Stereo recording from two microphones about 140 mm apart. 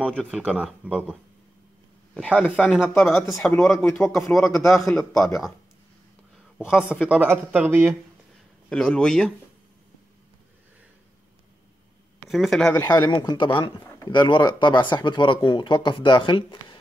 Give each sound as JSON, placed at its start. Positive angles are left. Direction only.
{"t": 0.0, "sound": "speech", "side_deg": 5}
{"t": 0.4, "sound": "speech", "side_deg": -10}
{"t": 2.1, "sound": "a man's voice", "side_deg": 10}
{"t": 6.7, "sound": "speech", "side_deg": 15}
{"t": 7.0, "sound": "speech", "side_deg": -10}
{"t": 8.6, "sound": "a man's voice", "side_deg": 5}
{"t": 12.3, "sound": "a man's voice", "side_deg": 0}
{"t": 12.8, "sound": "speech", "side_deg": 25}